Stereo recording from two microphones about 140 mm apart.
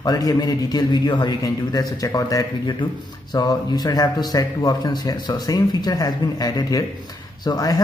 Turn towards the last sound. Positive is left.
turn(degrees=25)  # may be behind; listen again after turning